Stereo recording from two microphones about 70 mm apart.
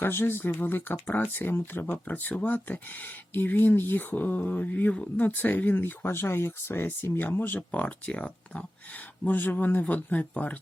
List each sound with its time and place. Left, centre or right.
0.0 s speech: left